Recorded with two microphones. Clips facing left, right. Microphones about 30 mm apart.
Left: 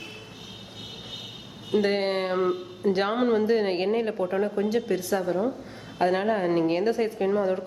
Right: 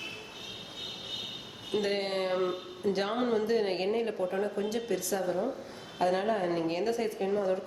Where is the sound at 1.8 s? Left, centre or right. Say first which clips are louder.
Left 5 dB; left.